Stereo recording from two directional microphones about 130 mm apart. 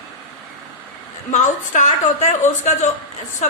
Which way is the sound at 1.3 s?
70° left (ahead or behind).